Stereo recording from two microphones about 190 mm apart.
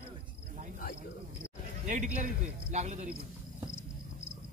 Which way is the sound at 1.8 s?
40° right (ahead or behind).